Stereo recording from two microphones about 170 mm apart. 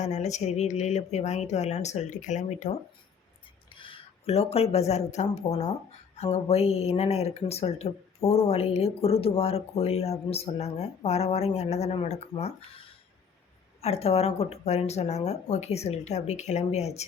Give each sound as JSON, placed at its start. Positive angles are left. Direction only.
{"t": 0.0, "sound": "speech", "side_deg": 45}
{"t": 3.8, "sound": "speech", "side_deg": 30}